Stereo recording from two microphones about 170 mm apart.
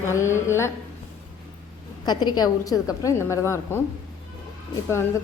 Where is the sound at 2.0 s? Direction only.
25° left (ahead or behind).